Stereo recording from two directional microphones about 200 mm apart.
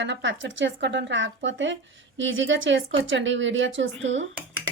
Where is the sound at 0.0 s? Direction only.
65° right (ahead or behind).